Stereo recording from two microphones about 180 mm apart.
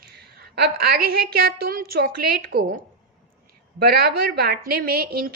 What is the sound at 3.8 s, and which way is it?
A woman's voice, 60° right (ahead or behind).